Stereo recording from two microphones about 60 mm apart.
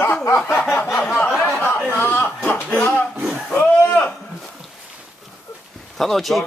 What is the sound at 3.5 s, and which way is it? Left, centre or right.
Speech, left.